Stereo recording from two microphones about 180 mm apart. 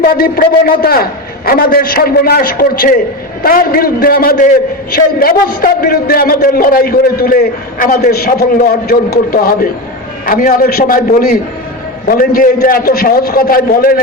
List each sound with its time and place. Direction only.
0.0 s a man's voice: 55° left (ahead or behind)